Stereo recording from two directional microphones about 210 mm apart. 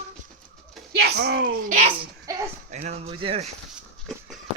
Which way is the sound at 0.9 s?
50° right (ahead or behind).